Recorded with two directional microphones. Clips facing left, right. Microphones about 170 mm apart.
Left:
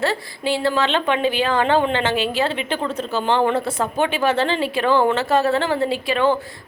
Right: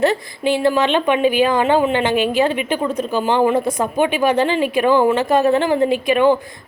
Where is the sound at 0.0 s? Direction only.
20° right (ahead or behind).